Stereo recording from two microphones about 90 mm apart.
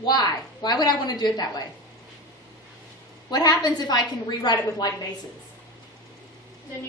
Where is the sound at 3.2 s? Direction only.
50° left (ahead or behind).